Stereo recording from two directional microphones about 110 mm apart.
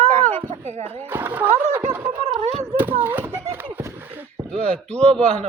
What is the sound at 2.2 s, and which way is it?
Speech, 85° right.